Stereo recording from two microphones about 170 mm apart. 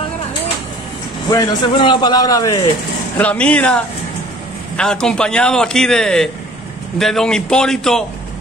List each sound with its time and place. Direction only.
1.3 s a man's voice: 25° left (ahead or behind)
3.2 s a man's voice: 10° left (ahead or behind)